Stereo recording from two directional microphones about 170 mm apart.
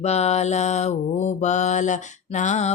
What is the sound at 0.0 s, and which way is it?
Mantra, 40° left (ahead or behind).